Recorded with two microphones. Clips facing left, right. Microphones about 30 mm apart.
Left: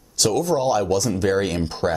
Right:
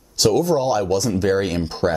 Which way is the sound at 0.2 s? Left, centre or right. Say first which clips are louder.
Right 3 dB; centre.